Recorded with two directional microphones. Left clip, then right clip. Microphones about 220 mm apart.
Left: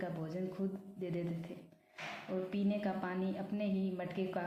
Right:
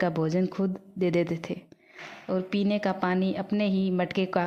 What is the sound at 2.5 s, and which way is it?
Speech, 50° right (ahead or behind).